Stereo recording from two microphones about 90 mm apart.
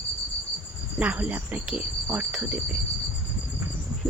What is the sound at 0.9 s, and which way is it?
Speech, 15° right (ahead or behind).